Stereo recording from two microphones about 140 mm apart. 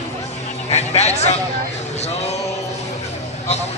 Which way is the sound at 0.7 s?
50° left (ahead or behind).